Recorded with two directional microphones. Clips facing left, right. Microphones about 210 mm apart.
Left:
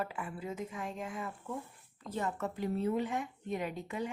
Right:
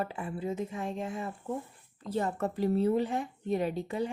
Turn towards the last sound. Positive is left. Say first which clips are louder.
# right 6 dB
turn(degrees=-30)  # may be behind; listen again after turning